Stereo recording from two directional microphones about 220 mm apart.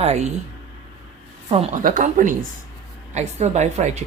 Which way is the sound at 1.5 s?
30° right (ahead or behind).